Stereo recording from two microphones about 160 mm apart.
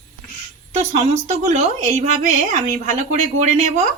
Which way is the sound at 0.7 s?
45° right (ahead or behind).